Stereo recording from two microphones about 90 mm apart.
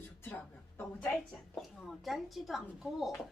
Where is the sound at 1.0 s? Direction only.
5° left (ahead or behind).